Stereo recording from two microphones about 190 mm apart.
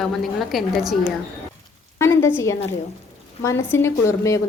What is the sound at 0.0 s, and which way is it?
Speech, centre (ahead or behind).